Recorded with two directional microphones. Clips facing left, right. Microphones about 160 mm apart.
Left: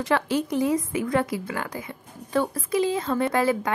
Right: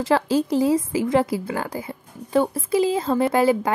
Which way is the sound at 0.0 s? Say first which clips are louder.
Right 4 dB; 30° right (ahead or behind).